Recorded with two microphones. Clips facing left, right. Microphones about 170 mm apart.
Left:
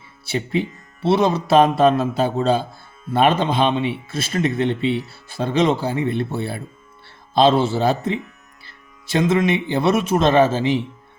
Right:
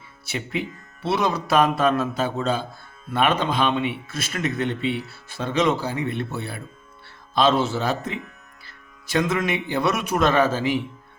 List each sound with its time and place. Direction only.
0.3 s a man's voice: 30° left (ahead or behind)